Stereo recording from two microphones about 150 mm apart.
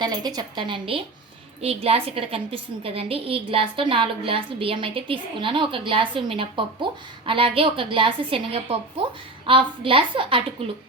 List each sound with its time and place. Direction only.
0.0 s a woman's voice: 25° right (ahead or behind)